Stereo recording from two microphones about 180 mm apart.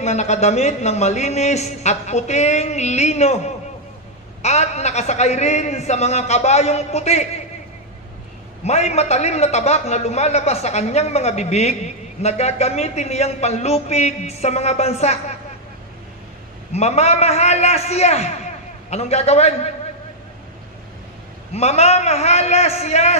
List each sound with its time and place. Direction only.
0.0 s a man's voice: 40° left (ahead or behind)
8.6 s a man's voice: 35° left (ahead or behind)
16.7 s a man's voice: 35° left (ahead or behind)
21.5 s a man's voice: 35° left (ahead or behind)